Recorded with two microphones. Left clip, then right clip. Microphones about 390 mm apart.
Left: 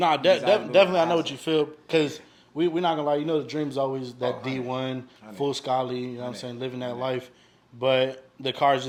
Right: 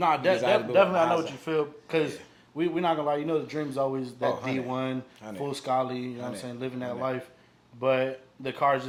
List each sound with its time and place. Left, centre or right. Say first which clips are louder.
0.0 s a man's voice: left 3 dB; left